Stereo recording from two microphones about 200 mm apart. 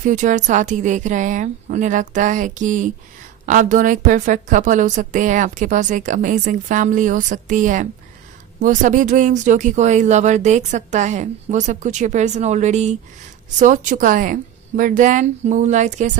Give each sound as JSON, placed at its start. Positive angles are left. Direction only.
{"t": 0.0, "sound": "a woman's voice", "side_deg": -40}